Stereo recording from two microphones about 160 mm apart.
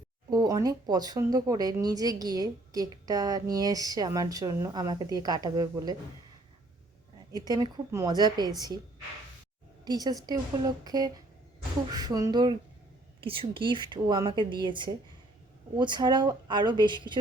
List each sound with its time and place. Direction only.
0.3 s speech: 25° right (ahead or behind)
7.4 s speech: 25° right (ahead or behind)
9.8 s a woman's voice: 25° right (ahead or behind)